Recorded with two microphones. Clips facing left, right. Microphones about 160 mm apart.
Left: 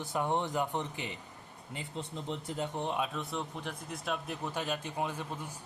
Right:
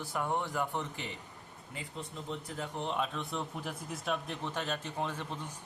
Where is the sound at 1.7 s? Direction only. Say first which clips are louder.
Left 3 dB; 30° left (ahead or behind).